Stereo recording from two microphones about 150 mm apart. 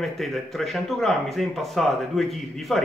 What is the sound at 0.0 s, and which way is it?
Speech, centre (ahead or behind).